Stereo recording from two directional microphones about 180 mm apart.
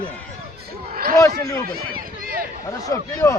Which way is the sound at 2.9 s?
15° left (ahead or behind).